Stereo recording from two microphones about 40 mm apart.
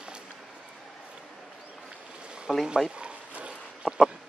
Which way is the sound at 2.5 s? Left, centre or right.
Centre.